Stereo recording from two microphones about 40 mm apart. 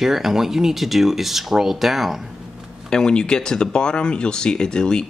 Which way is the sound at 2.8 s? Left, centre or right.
Centre.